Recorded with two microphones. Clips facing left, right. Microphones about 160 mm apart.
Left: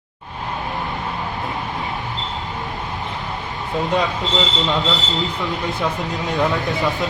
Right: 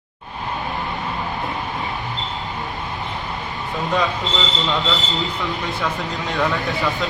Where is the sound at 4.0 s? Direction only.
20° left (ahead or behind).